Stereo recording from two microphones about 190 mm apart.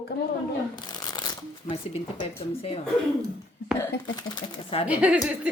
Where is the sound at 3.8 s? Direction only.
20° left (ahead or behind).